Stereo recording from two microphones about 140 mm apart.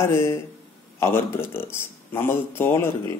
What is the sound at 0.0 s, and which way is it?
A man's voice, 20° left (ahead or behind).